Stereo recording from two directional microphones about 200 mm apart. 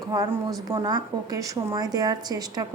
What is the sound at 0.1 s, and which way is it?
A woman's voice, 15° right (ahead or behind).